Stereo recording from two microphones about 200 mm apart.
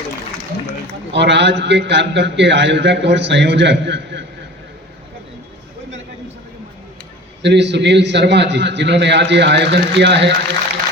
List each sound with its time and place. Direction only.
1.1 s a man's voice: 60° right (ahead or behind)
7.4 s a man's voice: 60° right (ahead or behind)